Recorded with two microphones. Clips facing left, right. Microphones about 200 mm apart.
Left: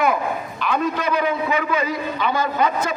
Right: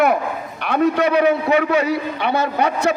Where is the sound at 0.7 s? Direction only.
65° right (ahead or behind).